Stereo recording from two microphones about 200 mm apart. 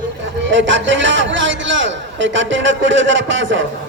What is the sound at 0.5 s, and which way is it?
A man's voice, 65° right (ahead or behind).